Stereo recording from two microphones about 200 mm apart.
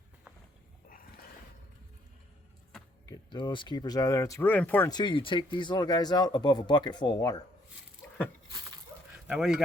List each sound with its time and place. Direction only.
0.9 s roaring cats: 45° left (ahead or behind)
3.1 s speech: 20° left (ahead or behind)
4.9 s speech: 20° left (ahead or behind)
9.1 s a sound: 5° right (ahead or behind)